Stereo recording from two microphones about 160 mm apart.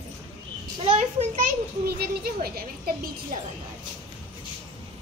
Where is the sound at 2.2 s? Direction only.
70° right (ahead or behind).